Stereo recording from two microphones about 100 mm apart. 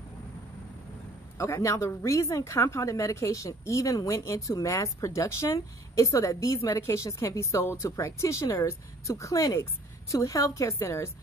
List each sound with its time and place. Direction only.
1.4 s a woman's voice: 30° left (ahead or behind)